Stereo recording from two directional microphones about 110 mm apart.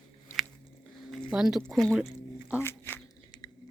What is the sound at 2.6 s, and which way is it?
Speech, 20° left (ahead or behind).